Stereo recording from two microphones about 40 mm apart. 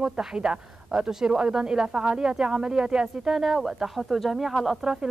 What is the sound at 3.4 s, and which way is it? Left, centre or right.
A woman's voice, centre.